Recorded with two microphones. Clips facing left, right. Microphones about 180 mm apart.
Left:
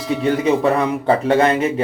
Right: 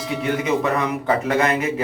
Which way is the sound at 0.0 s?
Centre (ahead or behind).